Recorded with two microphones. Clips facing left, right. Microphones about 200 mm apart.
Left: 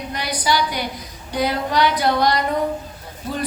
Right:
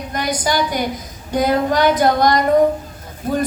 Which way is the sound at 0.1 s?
45° right (ahead or behind).